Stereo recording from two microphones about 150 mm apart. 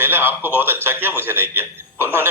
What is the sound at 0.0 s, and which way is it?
A man's voice, 15° right (ahead or behind).